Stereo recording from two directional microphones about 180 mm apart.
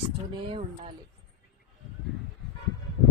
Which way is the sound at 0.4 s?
30° right (ahead or behind).